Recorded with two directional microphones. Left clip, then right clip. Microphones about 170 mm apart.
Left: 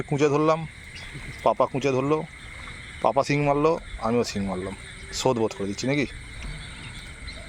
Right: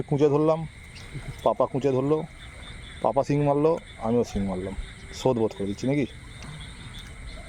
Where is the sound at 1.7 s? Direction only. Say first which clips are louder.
Even; 20° right (ahead or behind).